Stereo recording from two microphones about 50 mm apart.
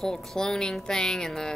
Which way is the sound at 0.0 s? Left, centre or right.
Centre.